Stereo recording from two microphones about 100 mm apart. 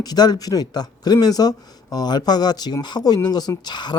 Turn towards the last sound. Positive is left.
turn(degrees=45)  # may be behind; listen again after turning